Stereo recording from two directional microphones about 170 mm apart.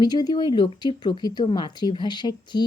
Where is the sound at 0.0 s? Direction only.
25° left (ahead or behind).